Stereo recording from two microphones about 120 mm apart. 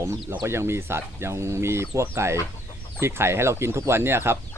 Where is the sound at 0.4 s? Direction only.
20° right (ahead or behind).